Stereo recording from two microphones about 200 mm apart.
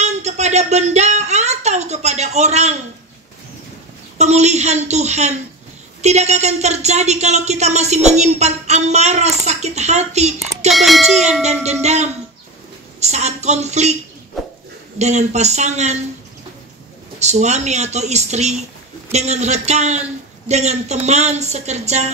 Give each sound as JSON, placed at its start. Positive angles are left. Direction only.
{"t": 0.0, "sound": "a sound", "side_deg": -35}
{"t": 4.2, "sound": "a woman's voice", "side_deg": -35}
{"t": 10.7, "sound": "a child's voice", "side_deg": 0}
{"t": 11.8, "sound": "a woman's voice", "side_deg": -35}
{"t": 15.0, "sound": "a woman's voice", "side_deg": -35}
{"t": 17.2, "sound": "a woman's voice", "side_deg": -35}